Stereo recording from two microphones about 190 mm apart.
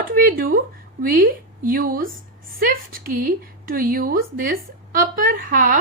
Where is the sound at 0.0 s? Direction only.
45° right (ahead or behind).